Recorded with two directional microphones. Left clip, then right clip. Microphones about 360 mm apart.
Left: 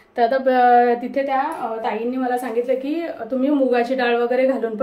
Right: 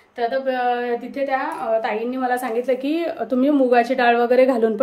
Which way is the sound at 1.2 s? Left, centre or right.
Centre.